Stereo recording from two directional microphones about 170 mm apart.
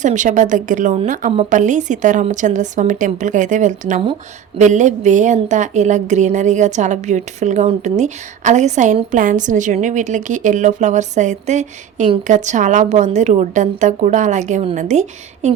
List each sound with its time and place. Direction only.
0.0 s a woman's voice: 45° right (ahead or behind)